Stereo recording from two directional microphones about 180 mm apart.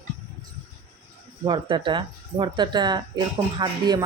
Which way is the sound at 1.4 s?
25° right (ahead or behind).